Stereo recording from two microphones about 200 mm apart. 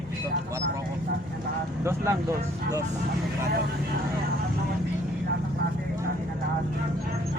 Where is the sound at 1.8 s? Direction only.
15° right (ahead or behind).